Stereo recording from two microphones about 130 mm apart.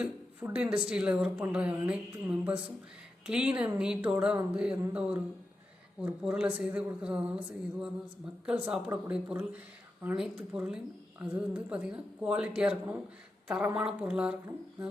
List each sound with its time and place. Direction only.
0.0 s speech: 10° right (ahead or behind)